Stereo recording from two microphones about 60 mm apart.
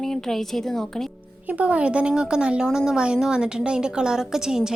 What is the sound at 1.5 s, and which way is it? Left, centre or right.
A woman's voice, right.